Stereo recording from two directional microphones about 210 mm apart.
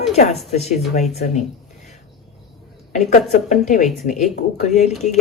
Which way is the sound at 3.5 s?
35° left (ahead or behind).